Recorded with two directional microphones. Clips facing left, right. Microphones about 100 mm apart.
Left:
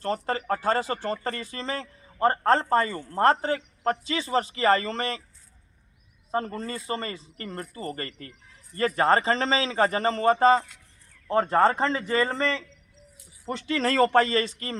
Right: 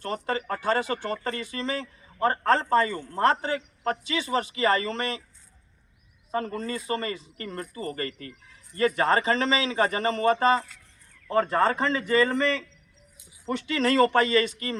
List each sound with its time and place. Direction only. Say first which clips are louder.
0.0 s speech: left 1 dB; 35° left (ahead or behind)
6.3 s speech: even; 35° left (ahead or behind)